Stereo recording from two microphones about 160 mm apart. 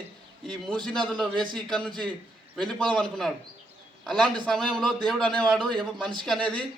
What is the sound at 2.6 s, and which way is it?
A man's voice, 5° left (ahead or behind).